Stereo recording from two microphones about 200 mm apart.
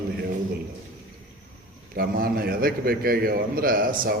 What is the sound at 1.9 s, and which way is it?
A man's voice, 50° right (ahead or behind).